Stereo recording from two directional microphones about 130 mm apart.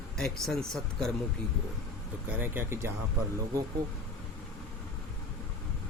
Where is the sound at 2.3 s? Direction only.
15° right (ahead or behind).